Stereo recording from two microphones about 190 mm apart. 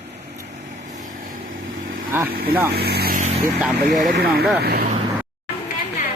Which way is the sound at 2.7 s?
55° right (ahead or behind).